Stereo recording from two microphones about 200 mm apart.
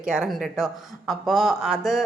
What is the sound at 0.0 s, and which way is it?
Speech, 5° right (ahead or behind).